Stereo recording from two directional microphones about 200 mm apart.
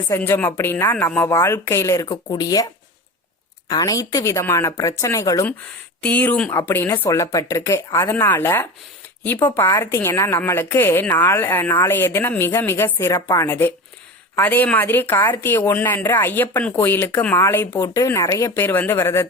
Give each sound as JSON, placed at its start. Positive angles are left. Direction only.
{"t": 0.1, "sound": "speech", "side_deg": 10}
{"t": 3.7, "sound": "speech", "side_deg": 20}